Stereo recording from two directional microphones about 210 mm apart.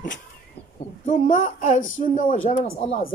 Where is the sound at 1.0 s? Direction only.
35° left (ahead or behind).